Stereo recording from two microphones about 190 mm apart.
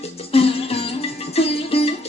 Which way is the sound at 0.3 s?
30° left (ahead or behind).